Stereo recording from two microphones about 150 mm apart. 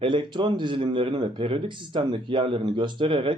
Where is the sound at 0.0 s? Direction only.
35° right (ahead or behind).